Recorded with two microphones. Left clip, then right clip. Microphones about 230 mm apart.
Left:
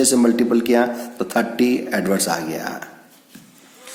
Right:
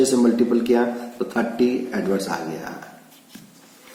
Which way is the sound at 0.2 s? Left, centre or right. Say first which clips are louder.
Left 2 dB; left.